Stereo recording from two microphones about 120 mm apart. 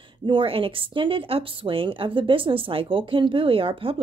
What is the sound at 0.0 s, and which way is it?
A woman's voice, 45° right (ahead or behind).